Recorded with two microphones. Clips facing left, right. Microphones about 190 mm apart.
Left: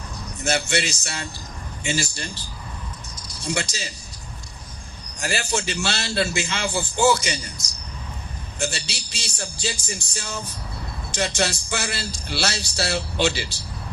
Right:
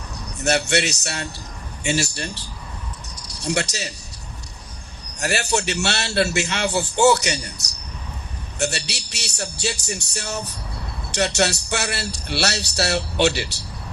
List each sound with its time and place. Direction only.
0.4 s a man's voice: 65° right (ahead or behind)
3.2 s music: 65° right (ahead or behind)
5.2 s a man's voice: 65° right (ahead or behind)